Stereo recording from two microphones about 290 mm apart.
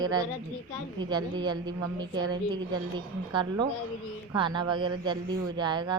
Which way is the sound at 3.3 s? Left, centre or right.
Centre.